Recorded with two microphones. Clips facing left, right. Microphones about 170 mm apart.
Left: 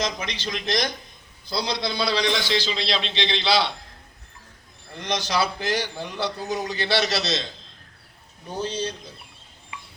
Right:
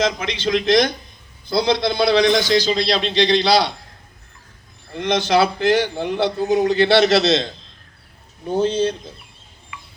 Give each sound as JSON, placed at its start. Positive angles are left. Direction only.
{"t": 0.0, "sound": "a man's voice", "side_deg": -55}
{"t": 4.9, "sound": "a man's voice", "side_deg": -55}
{"t": 8.6, "sound": "a man's voice", "side_deg": -55}